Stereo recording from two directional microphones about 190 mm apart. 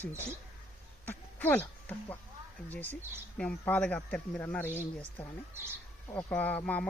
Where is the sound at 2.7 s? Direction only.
10° left (ahead or behind).